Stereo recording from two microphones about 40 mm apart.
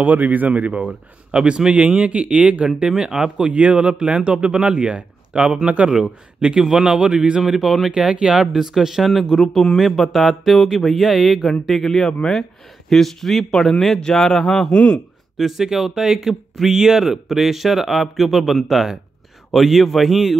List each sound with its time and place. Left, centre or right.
0.0 s a man's voice: right
2.9 s speech: centre
3.5 s speech: right
3.8 s a man's voice: right
6.7 s speech: centre
7.4 s speech: centre
7.9 s a man's voice: right
9.4 s a man's voice: centre
13.9 s a man's voice: centre
14.2 s a man's voice: centre
14.7 s speech: left
15.3 s speech: centre